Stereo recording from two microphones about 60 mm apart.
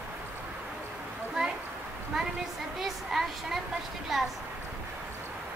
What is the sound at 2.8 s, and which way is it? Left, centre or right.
A woman's voice, centre.